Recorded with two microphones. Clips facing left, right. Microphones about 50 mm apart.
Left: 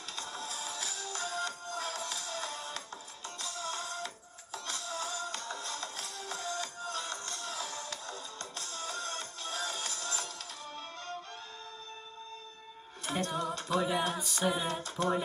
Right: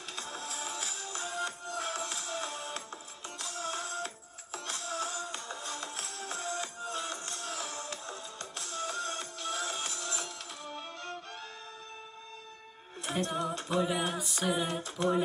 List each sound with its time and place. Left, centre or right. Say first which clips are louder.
0.0 s music: even; right
13.2 s music: right 1 dB; right